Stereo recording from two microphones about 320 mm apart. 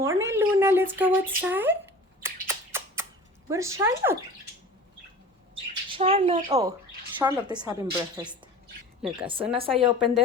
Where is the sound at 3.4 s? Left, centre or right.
Centre.